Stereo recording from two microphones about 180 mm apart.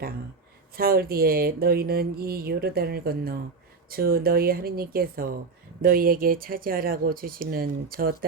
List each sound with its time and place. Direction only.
0.8 s speech: 55° right (ahead or behind)